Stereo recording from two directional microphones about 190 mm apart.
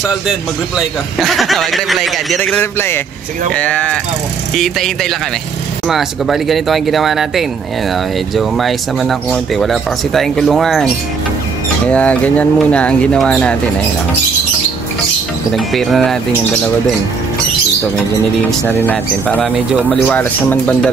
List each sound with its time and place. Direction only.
0.7 s speech: centre (ahead or behind)
11.9 s speech: 5° left (ahead or behind)
15.5 s speech: centre (ahead or behind)
18.5 s speech: 10° left (ahead or behind)